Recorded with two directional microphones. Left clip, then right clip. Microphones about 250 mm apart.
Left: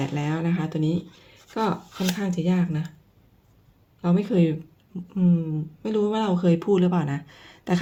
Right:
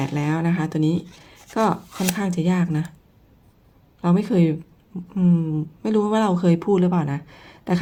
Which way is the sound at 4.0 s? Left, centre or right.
Centre.